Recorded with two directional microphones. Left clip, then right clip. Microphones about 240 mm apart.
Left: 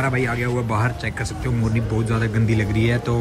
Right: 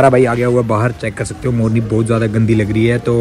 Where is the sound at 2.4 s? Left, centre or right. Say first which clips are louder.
Right 8 dB; left.